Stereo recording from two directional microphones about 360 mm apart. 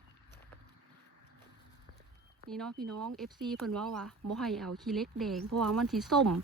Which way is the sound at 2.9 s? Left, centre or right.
Right.